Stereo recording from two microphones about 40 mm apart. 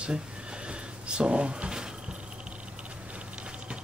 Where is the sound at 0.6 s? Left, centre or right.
Right.